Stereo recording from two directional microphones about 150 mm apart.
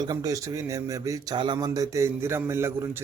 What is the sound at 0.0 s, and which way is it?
Speech, 25° right (ahead or behind).